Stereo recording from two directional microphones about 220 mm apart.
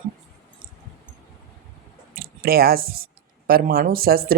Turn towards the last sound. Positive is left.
turn(degrees=-40)  # may be behind; listen again after turning